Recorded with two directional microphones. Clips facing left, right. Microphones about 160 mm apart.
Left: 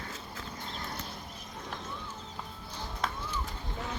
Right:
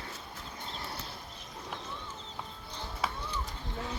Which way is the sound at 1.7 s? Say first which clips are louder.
Even; centre (ahead or behind).